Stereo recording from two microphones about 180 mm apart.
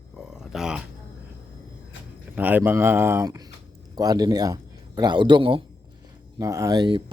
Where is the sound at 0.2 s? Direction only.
5° right (ahead or behind).